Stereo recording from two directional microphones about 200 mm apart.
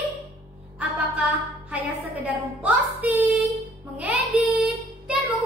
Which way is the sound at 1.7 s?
5° right (ahead or behind).